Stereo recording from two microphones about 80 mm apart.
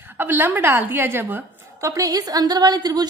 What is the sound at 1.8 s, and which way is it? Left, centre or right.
A woman's voice, right.